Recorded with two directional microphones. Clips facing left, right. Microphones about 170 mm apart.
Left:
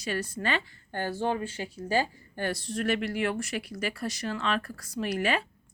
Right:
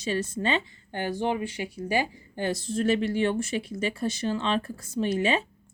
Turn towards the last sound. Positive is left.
turn(degrees=-25)  # may be behind; listen again after turning